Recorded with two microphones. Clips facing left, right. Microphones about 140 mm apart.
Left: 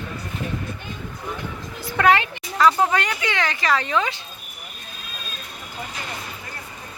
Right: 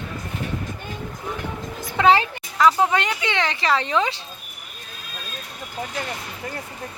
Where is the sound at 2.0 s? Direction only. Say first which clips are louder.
Right 1 dB; 30° right (ahead or behind).